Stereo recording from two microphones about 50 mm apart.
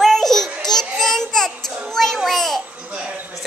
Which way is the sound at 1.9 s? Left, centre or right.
Centre.